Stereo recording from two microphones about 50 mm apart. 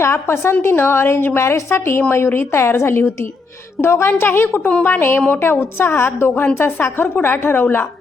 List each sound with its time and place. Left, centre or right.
0.0 s a woman's voice: left
1.4 s a woman's voice: left
2.0 s a woman's voice: left
6.1 s a woman's voice: left